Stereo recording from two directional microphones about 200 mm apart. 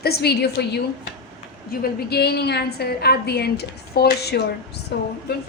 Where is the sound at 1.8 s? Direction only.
55° left (ahead or behind).